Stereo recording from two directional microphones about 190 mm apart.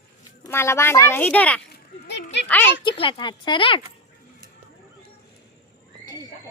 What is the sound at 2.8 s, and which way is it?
Speech, 25° left (ahead or behind).